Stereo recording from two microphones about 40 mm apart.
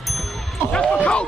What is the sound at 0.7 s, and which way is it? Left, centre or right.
Speech, left.